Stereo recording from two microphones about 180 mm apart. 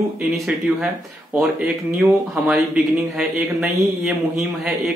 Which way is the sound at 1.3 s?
5° right (ahead or behind).